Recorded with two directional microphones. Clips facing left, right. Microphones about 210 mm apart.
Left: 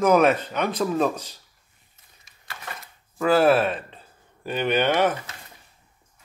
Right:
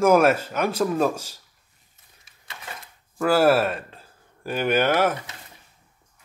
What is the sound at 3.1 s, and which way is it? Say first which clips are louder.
Speech: even; 5° right (ahead or behind).